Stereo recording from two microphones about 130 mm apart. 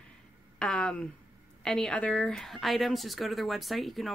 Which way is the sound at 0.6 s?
5° left (ahead or behind).